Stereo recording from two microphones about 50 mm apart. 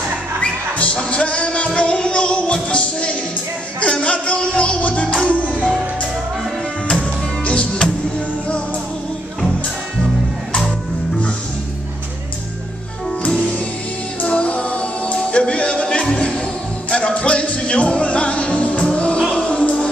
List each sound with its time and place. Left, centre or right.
0.4 s music: left
7.4 s music: left
14.2 s music: left